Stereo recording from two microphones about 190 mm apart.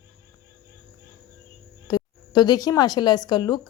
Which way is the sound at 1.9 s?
20° left (ahead or behind).